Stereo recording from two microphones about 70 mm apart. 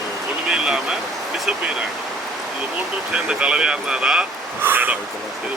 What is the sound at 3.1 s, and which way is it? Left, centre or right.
Speech, centre.